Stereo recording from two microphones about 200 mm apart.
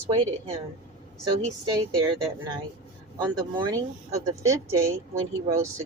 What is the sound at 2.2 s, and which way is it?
Speech, 20° right (ahead or behind).